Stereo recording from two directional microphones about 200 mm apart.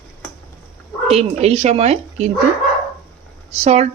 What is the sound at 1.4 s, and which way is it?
Speech, 30° right (ahead or behind).